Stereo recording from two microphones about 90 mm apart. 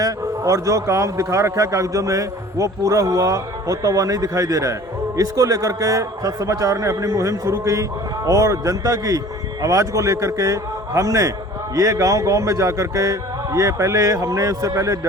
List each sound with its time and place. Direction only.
0.0 s a man's voice: 40° right (ahead or behind)